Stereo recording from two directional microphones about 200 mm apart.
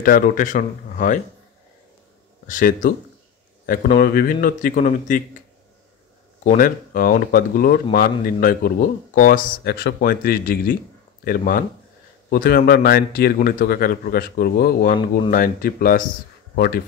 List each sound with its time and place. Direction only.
0.0 s speech: 45° left (ahead or behind)
2.4 s speech: 40° left (ahead or behind)
6.4 s speech: 45° left (ahead or behind)